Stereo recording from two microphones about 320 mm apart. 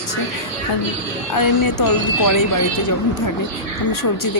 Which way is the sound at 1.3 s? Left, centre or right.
Left.